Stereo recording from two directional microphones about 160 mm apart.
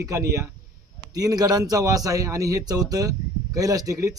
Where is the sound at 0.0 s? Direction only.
20° right (ahead or behind).